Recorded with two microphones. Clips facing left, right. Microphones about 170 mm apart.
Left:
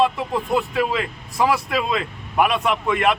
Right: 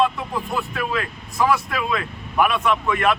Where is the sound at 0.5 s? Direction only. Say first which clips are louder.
Left 5 dB; 25° left (ahead or behind).